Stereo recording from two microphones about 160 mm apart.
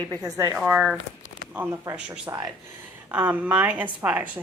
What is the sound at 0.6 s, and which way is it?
A woman's voice, 5° right (ahead or behind).